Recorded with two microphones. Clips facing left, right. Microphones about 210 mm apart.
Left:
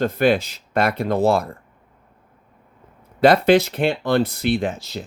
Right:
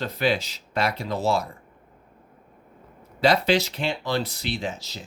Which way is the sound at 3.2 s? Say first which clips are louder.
Left 7 dB; 55° left (ahead or behind).